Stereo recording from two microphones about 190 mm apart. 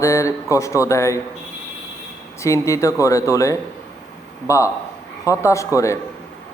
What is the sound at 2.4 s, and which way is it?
Speech, 15° left (ahead or behind).